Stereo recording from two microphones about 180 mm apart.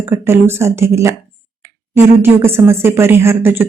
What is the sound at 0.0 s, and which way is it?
A woman's voice, 15° right (ahead or behind).